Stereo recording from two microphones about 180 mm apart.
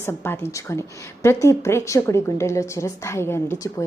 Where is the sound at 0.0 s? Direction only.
10° left (ahead or behind).